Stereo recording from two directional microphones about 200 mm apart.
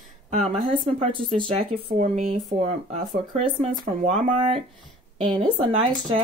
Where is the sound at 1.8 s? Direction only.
40° right (ahead or behind).